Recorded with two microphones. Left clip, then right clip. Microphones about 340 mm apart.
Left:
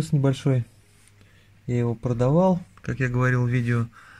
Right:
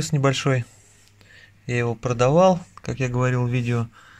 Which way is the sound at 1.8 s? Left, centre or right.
Right.